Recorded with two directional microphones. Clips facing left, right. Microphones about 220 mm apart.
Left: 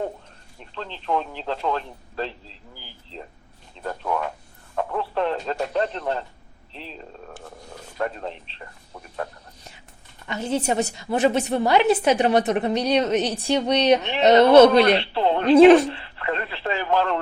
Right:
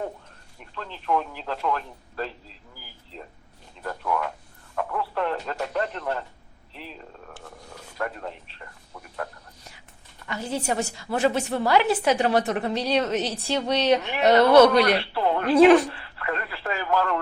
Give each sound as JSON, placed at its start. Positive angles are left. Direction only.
{"t": 0.6, "sound": "a woman's voice", "side_deg": 25}
{"t": 10.2, "sound": "a woman's voice", "side_deg": 20}